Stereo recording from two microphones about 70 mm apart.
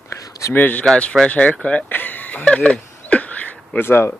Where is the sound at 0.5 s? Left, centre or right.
Left.